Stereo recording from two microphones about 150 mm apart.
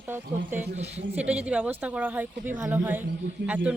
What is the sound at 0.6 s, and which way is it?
Speech, 45° right (ahead or behind).